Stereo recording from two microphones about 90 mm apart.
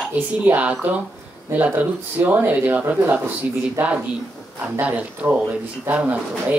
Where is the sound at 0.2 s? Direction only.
15° right (ahead or behind).